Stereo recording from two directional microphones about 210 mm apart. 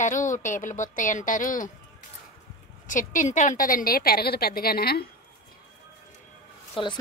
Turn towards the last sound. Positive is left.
turn(degrees=25)  # may be behind; listen again after turning